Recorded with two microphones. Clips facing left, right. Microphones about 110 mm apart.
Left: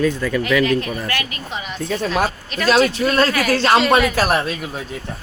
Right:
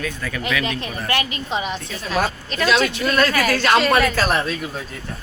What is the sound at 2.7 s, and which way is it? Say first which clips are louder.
Speech: left 4 dB; 35° left (ahead or behind).